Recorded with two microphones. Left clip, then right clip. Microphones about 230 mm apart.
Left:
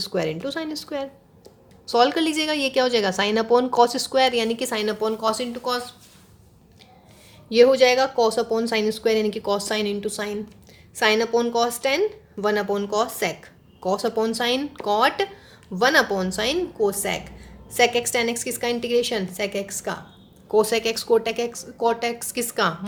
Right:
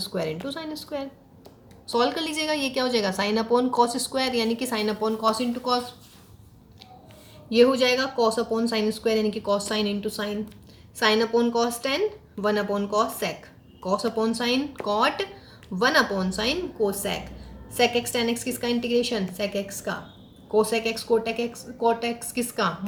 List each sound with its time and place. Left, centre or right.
0.0 s a woman's voice: left
7.5 s a woman's voice: left